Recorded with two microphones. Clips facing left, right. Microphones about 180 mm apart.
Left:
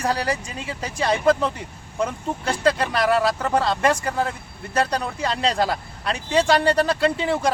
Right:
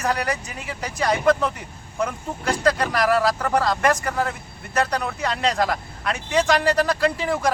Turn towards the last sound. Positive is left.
turn(degrees=25)  # may be behind; listen again after turning